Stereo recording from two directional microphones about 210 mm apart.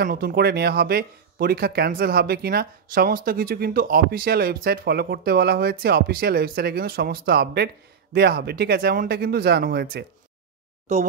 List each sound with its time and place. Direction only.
0.0 s speech: 45° right (ahead or behind)